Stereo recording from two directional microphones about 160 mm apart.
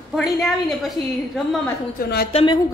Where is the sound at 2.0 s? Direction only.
70° left (ahead or behind).